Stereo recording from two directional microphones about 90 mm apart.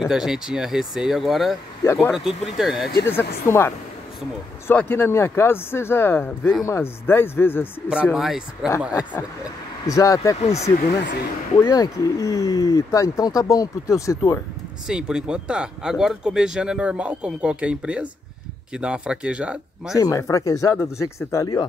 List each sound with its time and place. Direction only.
0.0 s speech: 5° right (ahead or behind)
3.1 s speech: 25° left (ahead or behind)
7.9 s speech: 10° right (ahead or behind)
9.4 s speech: 40° left (ahead or behind)
14.9 s speech: 10° right (ahead or behind)
20.0 s speech: 35° left (ahead or behind)